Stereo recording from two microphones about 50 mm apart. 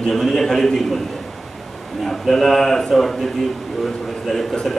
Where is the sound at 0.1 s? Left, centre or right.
Centre.